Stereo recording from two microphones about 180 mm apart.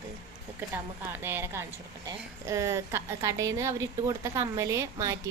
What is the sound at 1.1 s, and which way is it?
A woman's voice, 10° right (ahead or behind).